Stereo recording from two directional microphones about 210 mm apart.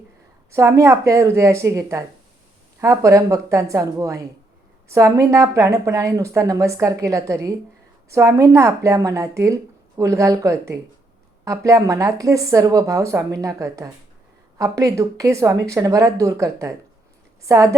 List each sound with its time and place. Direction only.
0.5 s a woman's voice: 15° right (ahead or behind)